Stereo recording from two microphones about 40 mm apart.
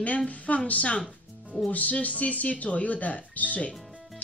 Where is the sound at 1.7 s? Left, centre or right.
Left.